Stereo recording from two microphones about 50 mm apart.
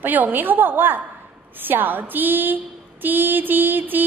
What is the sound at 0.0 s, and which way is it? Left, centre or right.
Speech, right.